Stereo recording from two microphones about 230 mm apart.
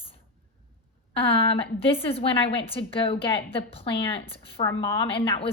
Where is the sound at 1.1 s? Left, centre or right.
Left.